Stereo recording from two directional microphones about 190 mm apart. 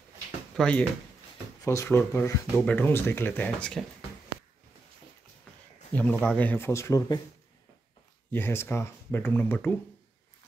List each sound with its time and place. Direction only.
0.6 s speech: 5° left (ahead or behind)
1.6 s speech: 15° left (ahead or behind)
5.9 s speech: 10° left (ahead or behind)
8.3 s speech: 10° left (ahead or behind)